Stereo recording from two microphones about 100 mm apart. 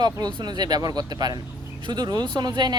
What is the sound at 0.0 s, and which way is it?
Speech, 45° right (ahead or behind).